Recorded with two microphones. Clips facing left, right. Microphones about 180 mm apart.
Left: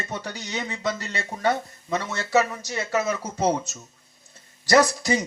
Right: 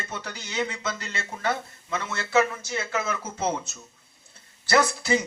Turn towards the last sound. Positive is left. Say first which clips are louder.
# left 3 dB
turn(degrees=40)  # may be behind; listen again after turning